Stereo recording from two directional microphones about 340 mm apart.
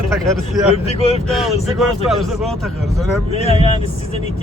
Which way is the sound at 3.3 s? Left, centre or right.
Centre.